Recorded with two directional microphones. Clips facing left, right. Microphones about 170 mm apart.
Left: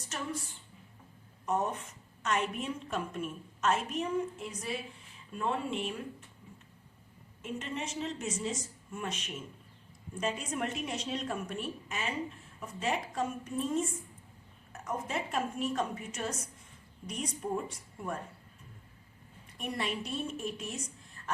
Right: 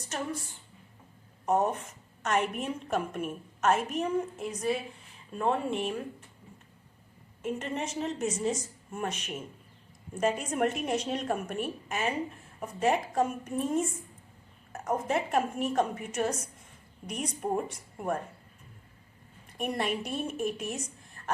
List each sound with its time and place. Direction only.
1.5 s a woman's voice: 45° right (ahead or behind)
7.4 s a woman's voice: 50° right (ahead or behind)
19.5 s a woman's voice: 55° right (ahead or behind)
21.2 s a sound: 45° right (ahead or behind)